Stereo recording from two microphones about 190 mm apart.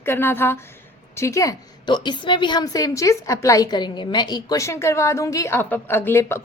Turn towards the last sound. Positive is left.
turn(degrees=15)  # may be behind; listen again after turning